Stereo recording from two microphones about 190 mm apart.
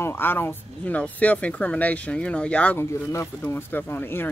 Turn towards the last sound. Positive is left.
turn(degrees=10)  # may be behind; listen again after turning